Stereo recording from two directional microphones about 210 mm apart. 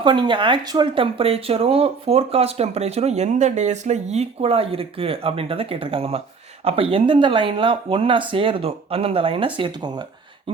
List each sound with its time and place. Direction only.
0.0 s speech: 20° right (ahead or behind)